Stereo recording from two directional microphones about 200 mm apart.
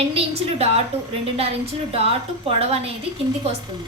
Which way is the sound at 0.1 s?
30° right (ahead or behind).